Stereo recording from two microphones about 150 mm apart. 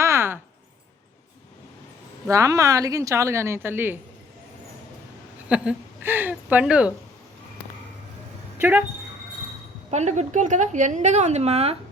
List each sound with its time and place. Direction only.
0.0 s a sound: 15° right (ahead or behind)
2.2 s a woman's voice: 20° right (ahead or behind)
5.5 s speech: 5° right (ahead or behind)
9.9 s a woman's voice: 50° right (ahead or behind)